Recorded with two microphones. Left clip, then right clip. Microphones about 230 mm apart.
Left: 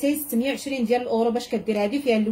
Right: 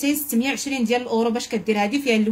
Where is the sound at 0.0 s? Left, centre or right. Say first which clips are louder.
Right 1 dB; right.